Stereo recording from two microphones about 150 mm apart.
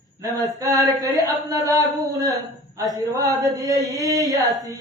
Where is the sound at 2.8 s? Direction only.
20° right (ahead or behind).